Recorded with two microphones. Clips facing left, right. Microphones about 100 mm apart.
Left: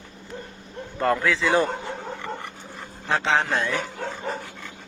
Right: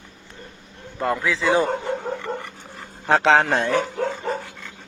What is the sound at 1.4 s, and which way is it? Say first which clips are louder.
Speech: right 2 dB; 20° right (ahead or behind).